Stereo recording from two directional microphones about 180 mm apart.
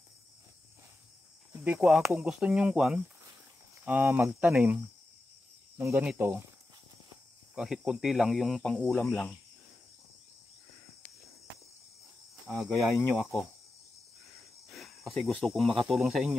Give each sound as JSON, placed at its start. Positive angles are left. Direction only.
{"t": 1.6, "sound": "speech", "side_deg": -10}
{"t": 5.8, "sound": "speech", "side_deg": -10}
{"t": 7.5, "sound": "speech", "side_deg": 0}
{"t": 12.4, "sound": "speech", "side_deg": -5}
{"t": 14.7, "sound": "speech", "side_deg": 0}